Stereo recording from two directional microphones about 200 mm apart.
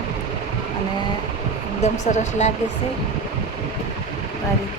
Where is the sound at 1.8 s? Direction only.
35° left (ahead or behind).